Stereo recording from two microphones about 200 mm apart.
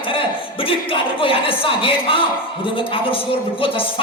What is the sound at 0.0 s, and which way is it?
A woman's voice, 25° left (ahead or behind).